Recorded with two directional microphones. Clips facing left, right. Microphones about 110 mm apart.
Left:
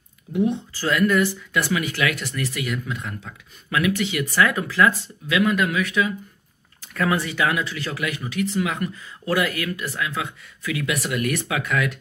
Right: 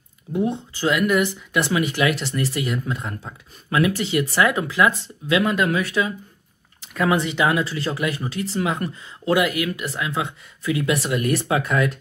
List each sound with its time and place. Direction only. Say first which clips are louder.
0.3 s speech: left 1 dB; 35° right (ahead or behind)
0.7 s speech: right 1 dB; 15° right (ahead or behind)
5.3 s speech: right 1 dB; 30° right (ahead or behind)
6.9 s speech: right 2 dB; 20° right (ahead or behind)
9.3 s speech: right 3 dB; 15° right (ahead or behind); by 12.0 s 30° right (ahead or behind)